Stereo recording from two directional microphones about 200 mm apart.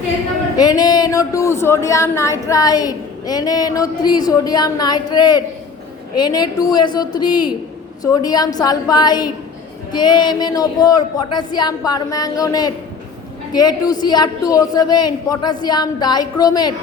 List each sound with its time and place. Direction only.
0.5 s speech: 20° left (ahead or behind)